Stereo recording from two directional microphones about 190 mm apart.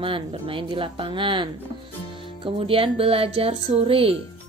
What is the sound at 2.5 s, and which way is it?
Speech, 30° right (ahead or behind).